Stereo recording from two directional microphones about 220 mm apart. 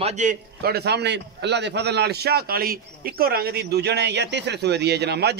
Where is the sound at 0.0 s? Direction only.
35° right (ahead or behind).